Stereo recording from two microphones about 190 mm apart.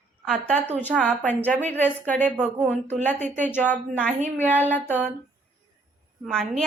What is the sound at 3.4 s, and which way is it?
A woman's voice, 10° left (ahead or behind).